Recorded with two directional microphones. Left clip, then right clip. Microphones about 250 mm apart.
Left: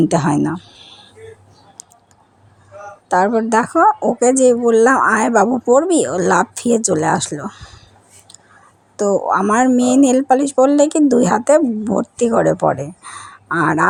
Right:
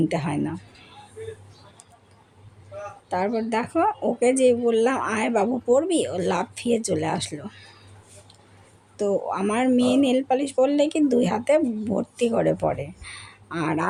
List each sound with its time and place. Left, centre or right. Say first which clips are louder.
0.0 s speech: left 10 dB; left
3.1 s speech: left 11 dB; left
9.0 s speech: left 9 dB; left